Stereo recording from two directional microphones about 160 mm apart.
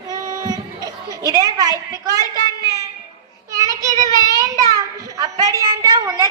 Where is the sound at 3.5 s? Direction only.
20° right (ahead or behind).